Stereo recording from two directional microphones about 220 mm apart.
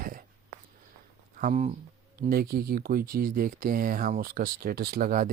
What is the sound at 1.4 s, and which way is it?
Speech, 35° right (ahead or behind).